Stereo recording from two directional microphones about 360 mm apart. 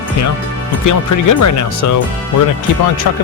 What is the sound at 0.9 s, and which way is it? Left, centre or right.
Speech, left.